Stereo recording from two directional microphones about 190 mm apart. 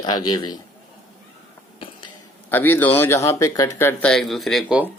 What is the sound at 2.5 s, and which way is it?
Speech, 10° left (ahead or behind).